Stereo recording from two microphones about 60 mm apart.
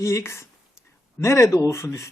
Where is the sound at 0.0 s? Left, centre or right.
Left.